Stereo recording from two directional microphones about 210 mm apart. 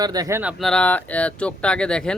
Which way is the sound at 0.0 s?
20° right (ahead or behind).